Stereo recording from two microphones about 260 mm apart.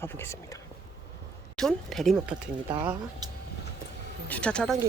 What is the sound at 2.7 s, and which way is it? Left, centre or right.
Speech, centre.